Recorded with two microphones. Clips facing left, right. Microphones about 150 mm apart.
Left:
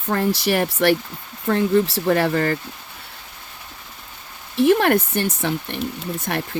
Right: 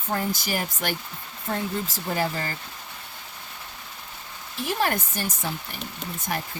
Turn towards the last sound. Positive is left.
turn(degrees=75)  # may be behind; listen again after turning